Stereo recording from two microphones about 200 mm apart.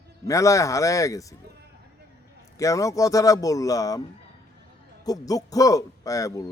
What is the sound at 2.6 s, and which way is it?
A man's voice, 15° left (ahead or behind).